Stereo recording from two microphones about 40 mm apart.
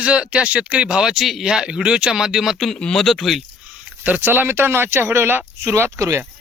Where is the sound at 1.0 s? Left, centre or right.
Centre.